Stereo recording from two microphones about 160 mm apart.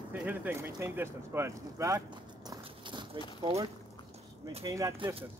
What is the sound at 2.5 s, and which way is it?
Horse, 30° right (ahead or behind).